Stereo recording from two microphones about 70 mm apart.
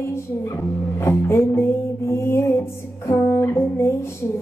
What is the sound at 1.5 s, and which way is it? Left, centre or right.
Music, left.